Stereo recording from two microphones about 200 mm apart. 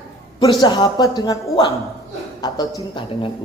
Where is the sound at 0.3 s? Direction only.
25° left (ahead or behind).